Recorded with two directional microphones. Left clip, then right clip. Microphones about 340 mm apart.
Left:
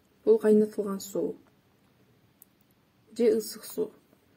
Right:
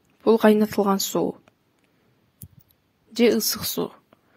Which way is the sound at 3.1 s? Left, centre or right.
Right.